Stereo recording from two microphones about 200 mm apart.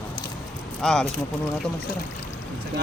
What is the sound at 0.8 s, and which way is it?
Speech, 5° left (ahead or behind).